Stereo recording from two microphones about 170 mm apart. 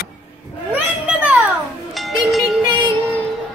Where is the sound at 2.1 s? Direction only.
Centre (ahead or behind).